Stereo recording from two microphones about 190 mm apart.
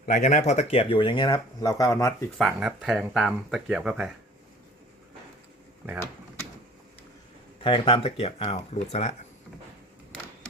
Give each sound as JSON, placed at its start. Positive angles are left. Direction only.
{"t": 0.0, "sound": "speech", "side_deg": 40}
{"t": 2.4, "sound": "speech", "side_deg": 0}
{"t": 7.6, "sound": "speech", "side_deg": 30}